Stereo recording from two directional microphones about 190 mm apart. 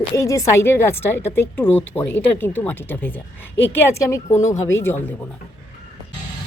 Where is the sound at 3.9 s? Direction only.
15° left (ahead or behind).